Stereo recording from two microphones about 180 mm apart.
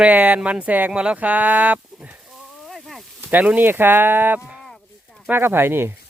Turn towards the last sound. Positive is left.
turn(degrees=-10)  # may be behind; listen again after turning